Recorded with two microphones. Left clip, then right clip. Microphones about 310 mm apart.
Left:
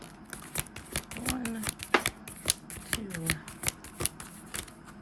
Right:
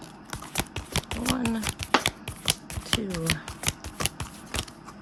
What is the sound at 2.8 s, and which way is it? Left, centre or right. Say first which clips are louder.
Shuffling cards: right 6 dB; centre.